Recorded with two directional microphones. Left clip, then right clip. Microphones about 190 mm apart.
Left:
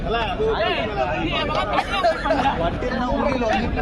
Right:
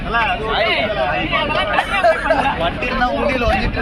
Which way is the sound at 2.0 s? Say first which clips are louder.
Right 6 dB; 35° right (ahead or behind).